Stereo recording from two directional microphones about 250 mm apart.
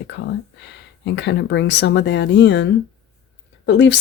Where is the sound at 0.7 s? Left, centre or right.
Left.